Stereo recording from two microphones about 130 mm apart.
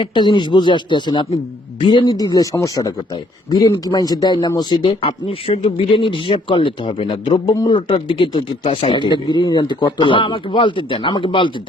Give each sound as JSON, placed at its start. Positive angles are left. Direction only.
{"t": 0.0, "sound": "speech", "side_deg": 35}